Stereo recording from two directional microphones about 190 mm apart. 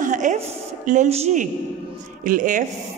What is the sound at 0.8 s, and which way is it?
A woman's voice, 40° right (ahead or behind).